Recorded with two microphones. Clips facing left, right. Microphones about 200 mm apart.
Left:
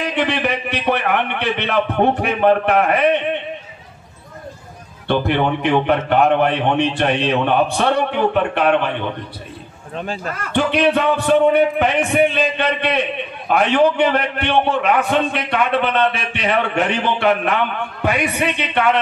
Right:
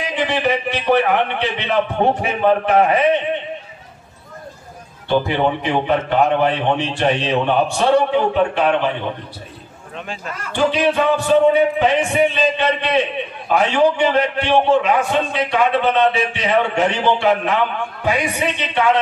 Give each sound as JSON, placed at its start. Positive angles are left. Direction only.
{"t": 0.0, "sound": "a man's voice", "side_deg": 60}
{"t": 5.0, "sound": "a man's voice", "side_deg": 60}
{"t": 9.9, "sound": "speech", "side_deg": 35}
{"t": 10.3, "sound": "a man's voice", "side_deg": 60}